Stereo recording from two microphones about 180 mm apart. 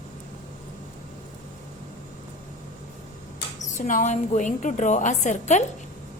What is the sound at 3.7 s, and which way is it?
A woman's voice, 45° left (ahead or behind).